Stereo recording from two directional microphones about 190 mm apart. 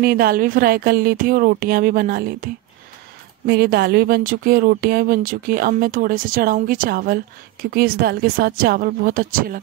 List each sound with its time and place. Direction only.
0.0 s speech: 50° right (ahead or behind)